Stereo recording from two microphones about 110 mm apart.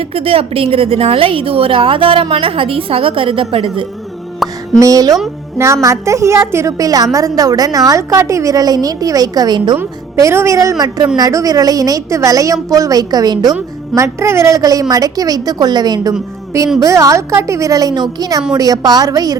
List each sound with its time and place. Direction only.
0.0 s a woman's voice: 60° right (ahead or behind)
4.4 s music: centre (ahead or behind)
4.8 s a woman's voice: 30° right (ahead or behind)
10.2 s a woman's voice: 25° right (ahead or behind)
13.9 s a woman's voice: 25° right (ahead or behind)